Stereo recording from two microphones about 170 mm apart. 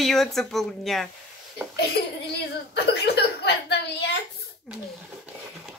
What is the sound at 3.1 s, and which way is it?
A woman's voice, 85° left.